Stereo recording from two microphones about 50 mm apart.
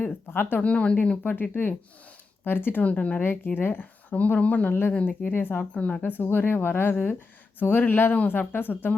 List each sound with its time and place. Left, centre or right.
0.0 s speech: left
0.6 s speech: left
1.2 s a woman's voice: left
2.8 s speech: left
3.2 s speech: left
4.1 s a woman's voice: left
5.3 s speech: left
5.7 s a woman's voice: left